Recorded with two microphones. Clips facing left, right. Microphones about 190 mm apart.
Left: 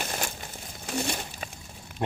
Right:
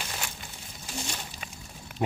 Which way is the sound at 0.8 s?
60° left (ahead or behind).